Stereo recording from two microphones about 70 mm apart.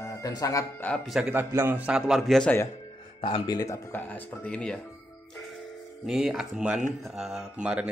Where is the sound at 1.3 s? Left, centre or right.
Right.